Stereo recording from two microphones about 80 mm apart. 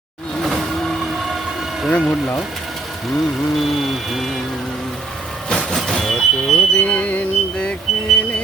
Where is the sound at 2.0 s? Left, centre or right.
Centre.